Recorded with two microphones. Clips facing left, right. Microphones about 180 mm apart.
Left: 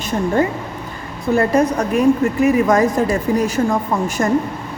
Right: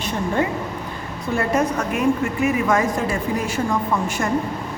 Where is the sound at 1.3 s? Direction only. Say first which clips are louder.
Left 5 dB; 35° left (ahead or behind).